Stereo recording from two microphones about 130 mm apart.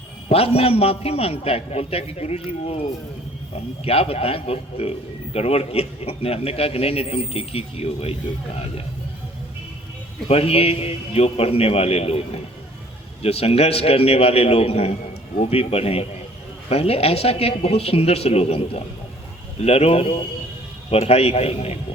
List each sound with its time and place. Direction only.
0.3 s a man's voice: 50° left (ahead or behind)
3.5 s a man's voice: 50° left (ahead or behind)
10.2 s a man's voice: 50° left (ahead or behind)